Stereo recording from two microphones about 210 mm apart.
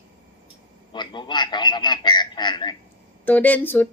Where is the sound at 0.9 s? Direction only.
20° left (ahead or behind).